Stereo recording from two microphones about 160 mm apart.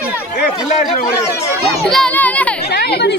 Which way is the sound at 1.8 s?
5° left (ahead or behind).